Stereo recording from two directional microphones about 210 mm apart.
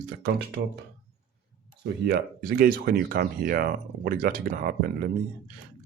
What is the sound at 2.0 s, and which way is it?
Speech, 45° right (ahead or behind).